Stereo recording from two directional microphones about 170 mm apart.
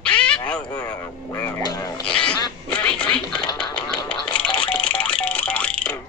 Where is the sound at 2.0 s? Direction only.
5° left (ahead or behind).